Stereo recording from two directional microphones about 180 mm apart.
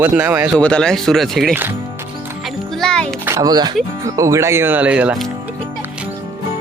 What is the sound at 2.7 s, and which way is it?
Music, 5° left (ahead or behind).